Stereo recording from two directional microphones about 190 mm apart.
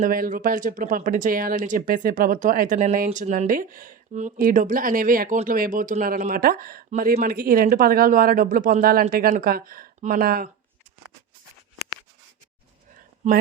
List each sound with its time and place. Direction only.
0.0 s speech: 45° right (ahead or behind)